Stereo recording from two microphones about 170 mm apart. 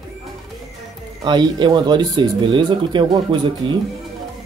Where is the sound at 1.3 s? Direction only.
25° right (ahead or behind).